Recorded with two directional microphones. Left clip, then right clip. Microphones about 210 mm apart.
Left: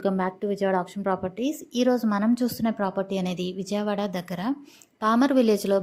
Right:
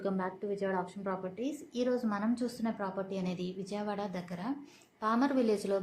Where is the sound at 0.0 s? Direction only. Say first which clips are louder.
Left 9 dB; 40° left (ahead or behind).